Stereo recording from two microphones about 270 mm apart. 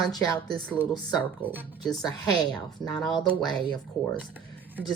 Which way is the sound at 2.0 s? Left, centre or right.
Centre.